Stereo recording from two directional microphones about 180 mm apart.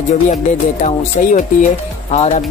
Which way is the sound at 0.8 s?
45° left (ahead or behind).